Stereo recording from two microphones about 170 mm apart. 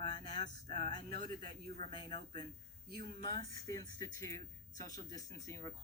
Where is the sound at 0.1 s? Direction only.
25° left (ahead or behind).